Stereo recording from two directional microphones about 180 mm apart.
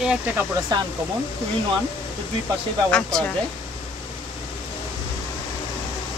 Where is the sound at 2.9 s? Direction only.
5° left (ahead or behind).